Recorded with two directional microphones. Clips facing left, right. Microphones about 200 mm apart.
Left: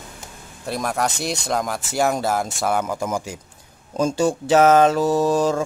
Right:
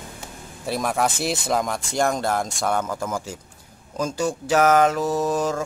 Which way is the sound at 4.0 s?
25° left (ahead or behind).